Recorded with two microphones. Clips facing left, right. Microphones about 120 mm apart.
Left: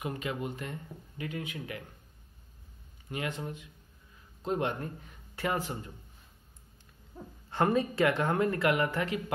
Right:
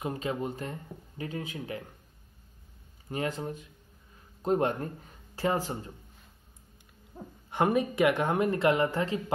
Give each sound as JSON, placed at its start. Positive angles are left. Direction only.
{"t": 0.0, "sound": "speech", "side_deg": -30}
{"t": 3.1, "sound": "speech", "side_deg": -35}
{"t": 7.2, "sound": "speech", "side_deg": -15}